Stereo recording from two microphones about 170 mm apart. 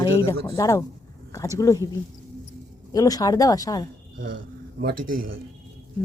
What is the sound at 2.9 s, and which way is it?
Speech, 20° left (ahead or behind).